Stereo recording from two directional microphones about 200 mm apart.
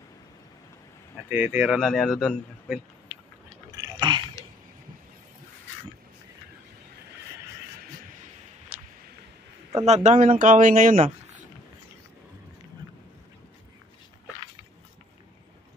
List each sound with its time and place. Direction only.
1.3 s a man's voice: 10° right (ahead or behind)
3.7 s biting: 20° right (ahead or behind)
9.8 s speech: 35° right (ahead or behind)